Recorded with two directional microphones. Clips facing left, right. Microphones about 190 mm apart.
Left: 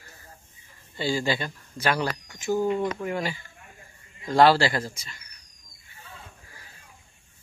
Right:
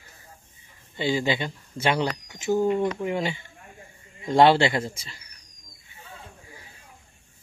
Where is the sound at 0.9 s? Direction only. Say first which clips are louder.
Right 2 dB; 20° right (ahead or behind).